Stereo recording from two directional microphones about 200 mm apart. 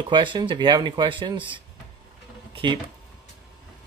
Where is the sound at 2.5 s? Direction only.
25° right (ahead or behind).